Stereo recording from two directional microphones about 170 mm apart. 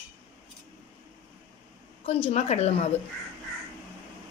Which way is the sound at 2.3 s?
40° left (ahead or behind).